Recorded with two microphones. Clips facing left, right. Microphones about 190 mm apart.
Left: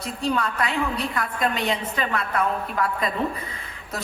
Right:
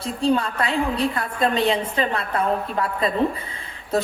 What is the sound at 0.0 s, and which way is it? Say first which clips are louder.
A woman's voice: right 4 dB; 30° right (ahead or behind).